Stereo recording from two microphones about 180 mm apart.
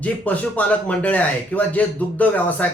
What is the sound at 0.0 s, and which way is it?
Speech, 10° left (ahead or behind).